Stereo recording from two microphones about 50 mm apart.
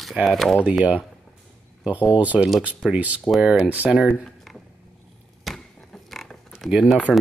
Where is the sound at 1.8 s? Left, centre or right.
Right.